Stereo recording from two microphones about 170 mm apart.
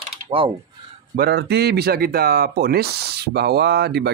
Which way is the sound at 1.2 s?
70° right (ahead or behind).